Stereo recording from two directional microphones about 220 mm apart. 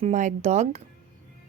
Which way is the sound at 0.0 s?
35° right (ahead or behind).